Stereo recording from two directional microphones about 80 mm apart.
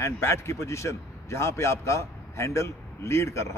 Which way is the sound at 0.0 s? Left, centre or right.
Left.